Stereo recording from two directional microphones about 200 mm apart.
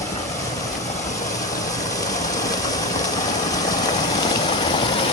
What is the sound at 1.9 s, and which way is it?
Vehicle, 15° left (ahead or behind).